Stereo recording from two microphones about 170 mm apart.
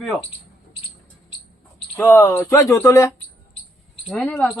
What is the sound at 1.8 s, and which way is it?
Speech, 10° left (ahead or behind).